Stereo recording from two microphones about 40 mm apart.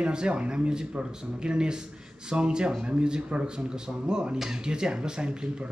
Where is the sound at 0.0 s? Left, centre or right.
Right.